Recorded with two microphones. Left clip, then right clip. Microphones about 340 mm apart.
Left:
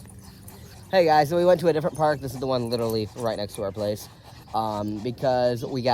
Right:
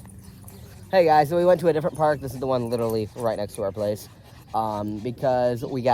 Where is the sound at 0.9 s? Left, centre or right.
Centre.